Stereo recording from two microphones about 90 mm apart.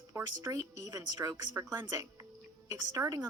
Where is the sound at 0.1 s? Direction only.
30° right (ahead or behind).